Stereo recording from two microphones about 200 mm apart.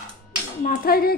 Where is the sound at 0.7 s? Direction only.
50° left (ahead or behind).